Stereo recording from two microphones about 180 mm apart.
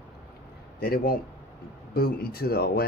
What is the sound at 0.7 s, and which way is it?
Speech, 55° left (ahead or behind).